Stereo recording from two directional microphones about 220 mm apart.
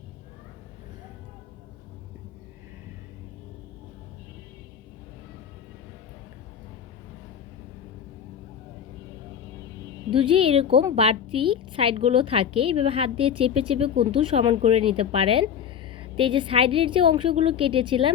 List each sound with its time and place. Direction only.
10.1 s a woman's voice: 25° right (ahead or behind)